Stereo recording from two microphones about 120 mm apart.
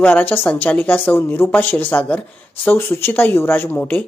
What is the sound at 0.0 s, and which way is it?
Speech, 15° left (ahead or behind).